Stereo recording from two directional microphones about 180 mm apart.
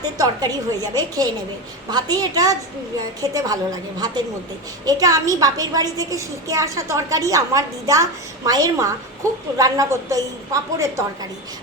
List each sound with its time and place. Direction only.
0.0 s a woman's voice: 20° right (ahead or behind)
4.9 s a woman's voice: 20° right (ahead or behind)